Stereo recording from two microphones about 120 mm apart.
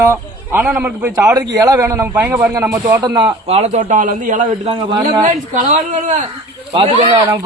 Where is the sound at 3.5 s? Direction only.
70° right (ahead or behind); by 6.2 s 90° right.